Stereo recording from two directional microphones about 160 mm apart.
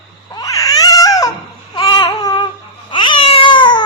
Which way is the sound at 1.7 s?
30° left (ahead or behind).